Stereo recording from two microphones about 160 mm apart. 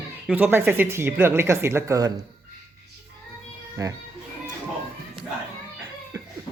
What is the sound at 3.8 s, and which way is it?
Speech, 20° right (ahead or behind).